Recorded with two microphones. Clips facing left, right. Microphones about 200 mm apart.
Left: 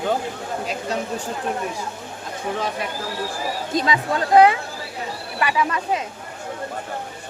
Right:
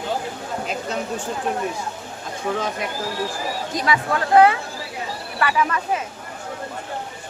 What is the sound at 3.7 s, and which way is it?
Speech, 25° left (ahead or behind).